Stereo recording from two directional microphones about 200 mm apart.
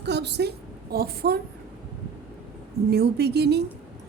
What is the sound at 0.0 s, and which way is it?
A woman's voice, 55° right (ahead or behind).